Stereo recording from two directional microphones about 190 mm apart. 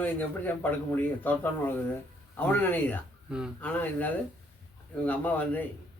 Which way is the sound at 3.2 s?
5° right (ahead or behind).